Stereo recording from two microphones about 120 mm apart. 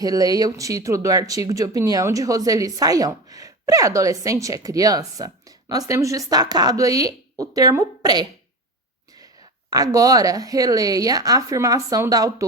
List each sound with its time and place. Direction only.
0.0 s speech: 30° right (ahead or behind)